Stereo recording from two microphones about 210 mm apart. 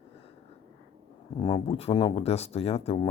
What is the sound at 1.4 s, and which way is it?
Speech, 25° left (ahead or behind).